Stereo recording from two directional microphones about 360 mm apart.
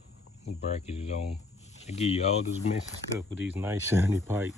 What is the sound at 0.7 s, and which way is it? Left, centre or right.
Speech, centre.